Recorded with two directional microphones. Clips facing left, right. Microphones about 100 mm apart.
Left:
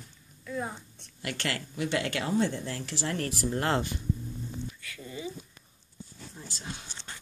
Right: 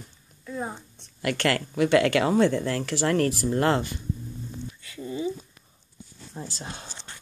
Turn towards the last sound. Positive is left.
turn(degrees=-35)  # may be behind; listen again after turning